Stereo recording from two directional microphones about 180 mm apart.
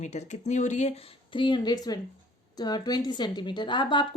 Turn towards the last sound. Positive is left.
turn(degrees=25)  # may be behind; listen again after turning